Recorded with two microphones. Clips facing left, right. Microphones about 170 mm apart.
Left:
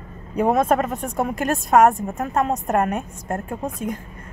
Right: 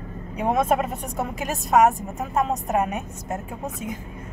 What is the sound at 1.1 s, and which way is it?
Speech, 60° left (ahead or behind).